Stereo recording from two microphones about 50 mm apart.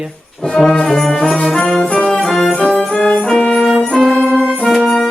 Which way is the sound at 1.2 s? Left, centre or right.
Centre.